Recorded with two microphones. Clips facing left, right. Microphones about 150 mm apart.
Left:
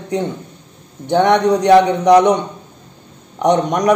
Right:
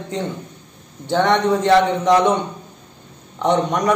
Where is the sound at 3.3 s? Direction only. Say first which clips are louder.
Left 3 dB; 15° left (ahead or behind).